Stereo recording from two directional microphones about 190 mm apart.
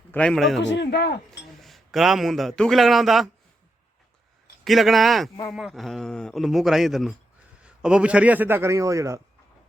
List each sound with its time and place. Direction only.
0.1 s speech: 5° left (ahead or behind)
0.6 s speech: 70° left (ahead or behind)
1.6 s a man's voice: centre (ahead or behind)
4.6 s a man's voice: centre (ahead or behind); by 9.2 s 15° right (ahead or behind)